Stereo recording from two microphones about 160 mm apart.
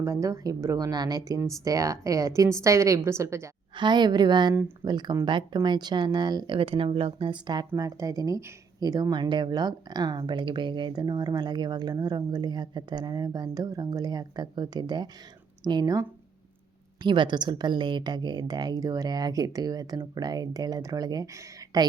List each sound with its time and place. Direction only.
0.0 s speech: 20° right (ahead or behind)
3.8 s speech: 25° right (ahead or behind)